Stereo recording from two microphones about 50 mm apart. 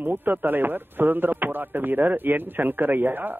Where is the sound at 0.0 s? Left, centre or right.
Right.